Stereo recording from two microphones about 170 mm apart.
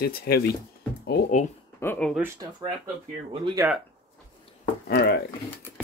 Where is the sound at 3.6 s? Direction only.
15° right (ahead or behind).